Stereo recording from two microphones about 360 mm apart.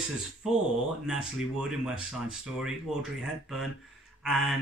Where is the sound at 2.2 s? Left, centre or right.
Centre.